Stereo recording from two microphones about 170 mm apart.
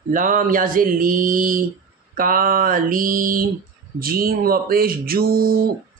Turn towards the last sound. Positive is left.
turn(degrees=-60)  # may be behind; listen again after turning